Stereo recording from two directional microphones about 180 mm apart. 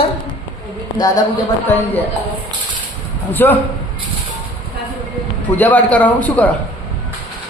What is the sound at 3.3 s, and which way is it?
Speech, 10° left (ahead or behind).